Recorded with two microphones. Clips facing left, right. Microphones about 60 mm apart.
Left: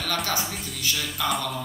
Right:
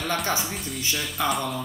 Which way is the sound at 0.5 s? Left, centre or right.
Centre.